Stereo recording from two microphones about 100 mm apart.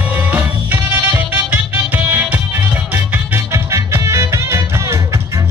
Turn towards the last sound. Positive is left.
turn(degrees=-25)  # may be behind; listen again after turning